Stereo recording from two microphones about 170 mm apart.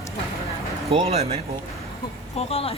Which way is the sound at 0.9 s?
35° right (ahead or behind).